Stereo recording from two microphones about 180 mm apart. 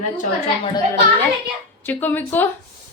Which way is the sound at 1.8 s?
10° left (ahead or behind).